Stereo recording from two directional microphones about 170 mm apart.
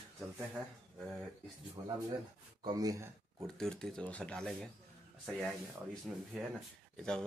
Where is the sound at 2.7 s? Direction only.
20° right (ahead or behind).